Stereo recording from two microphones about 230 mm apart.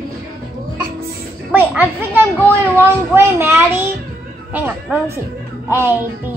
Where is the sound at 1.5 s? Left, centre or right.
Centre.